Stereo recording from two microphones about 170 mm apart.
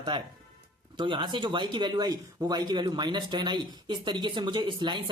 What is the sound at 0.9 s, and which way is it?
Speech, 30° right (ahead or behind).